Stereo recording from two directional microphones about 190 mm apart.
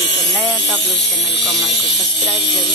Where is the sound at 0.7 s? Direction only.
65° left (ahead or behind).